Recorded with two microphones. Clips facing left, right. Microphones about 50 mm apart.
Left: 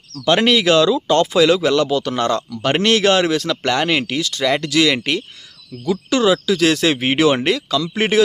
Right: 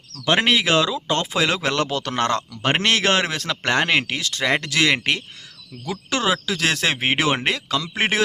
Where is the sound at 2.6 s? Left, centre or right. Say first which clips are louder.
Left 5 dB; right.